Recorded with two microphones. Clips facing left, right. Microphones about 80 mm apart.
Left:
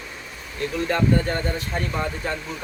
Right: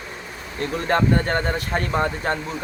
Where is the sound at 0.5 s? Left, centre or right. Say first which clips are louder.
Right 2 dB; right.